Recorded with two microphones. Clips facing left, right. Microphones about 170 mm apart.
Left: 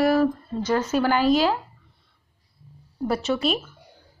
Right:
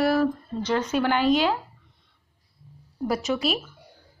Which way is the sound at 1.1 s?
40° left (ahead or behind).